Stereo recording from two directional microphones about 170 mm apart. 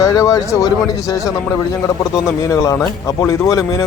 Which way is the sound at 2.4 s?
15° left (ahead or behind).